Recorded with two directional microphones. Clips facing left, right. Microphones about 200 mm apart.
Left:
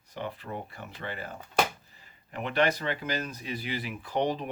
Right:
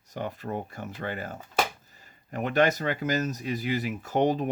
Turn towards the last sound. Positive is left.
turn(degrees=-45)  # may be behind; listen again after turning